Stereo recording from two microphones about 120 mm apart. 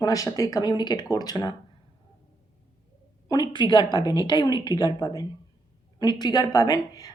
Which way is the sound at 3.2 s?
35° left (ahead or behind).